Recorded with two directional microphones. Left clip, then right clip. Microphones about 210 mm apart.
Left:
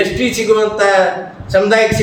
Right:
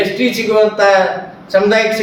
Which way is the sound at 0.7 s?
15° left (ahead or behind).